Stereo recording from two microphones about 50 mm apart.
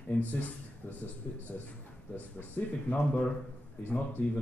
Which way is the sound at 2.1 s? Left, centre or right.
Left.